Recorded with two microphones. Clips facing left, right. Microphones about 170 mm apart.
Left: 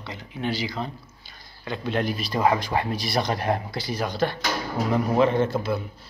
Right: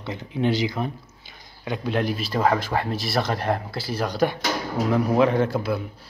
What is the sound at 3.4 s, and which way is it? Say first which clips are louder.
Speech: even; 10° left (ahead or behind).